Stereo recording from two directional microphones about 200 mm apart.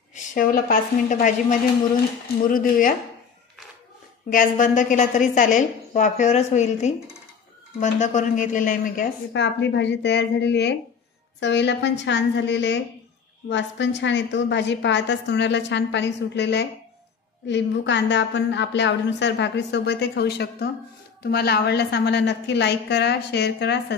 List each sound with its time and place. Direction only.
0.1 s a woman's voice: 40° left (ahead or behind)
4.3 s a woman's voice: 40° left (ahead or behind)
9.3 s a woman's voice: 60° left (ahead or behind)